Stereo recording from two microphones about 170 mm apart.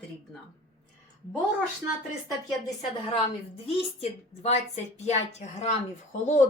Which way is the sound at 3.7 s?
35° left (ahead or behind).